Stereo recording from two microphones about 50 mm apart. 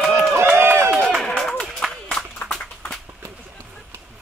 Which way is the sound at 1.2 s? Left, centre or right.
Centre.